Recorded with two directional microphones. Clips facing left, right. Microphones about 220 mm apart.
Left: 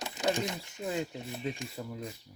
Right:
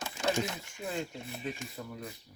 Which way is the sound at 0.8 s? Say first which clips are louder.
Left 3 dB; 20° left (ahead or behind).